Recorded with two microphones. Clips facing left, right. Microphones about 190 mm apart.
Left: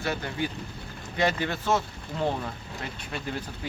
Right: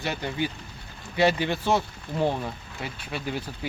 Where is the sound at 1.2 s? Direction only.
10° right (ahead or behind).